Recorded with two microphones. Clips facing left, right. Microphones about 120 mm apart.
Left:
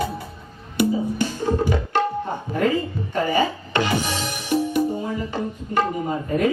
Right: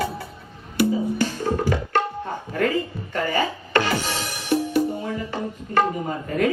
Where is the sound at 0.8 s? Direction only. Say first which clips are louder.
Even; 20° left (ahead or behind).